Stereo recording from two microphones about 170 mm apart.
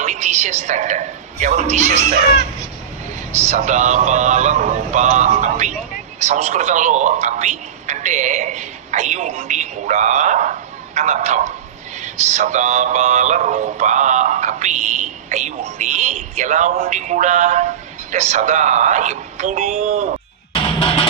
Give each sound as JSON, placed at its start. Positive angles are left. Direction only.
{"t": 0.0, "sound": "a woman's voice", "side_deg": -45}
{"t": 3.3, "sound": "speech", "side_deg": -45}
{"t": 20.7, "sound": "music", "side_deg": 35}